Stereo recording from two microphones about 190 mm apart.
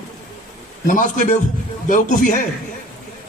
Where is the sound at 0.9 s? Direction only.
45° left (ahead or behind).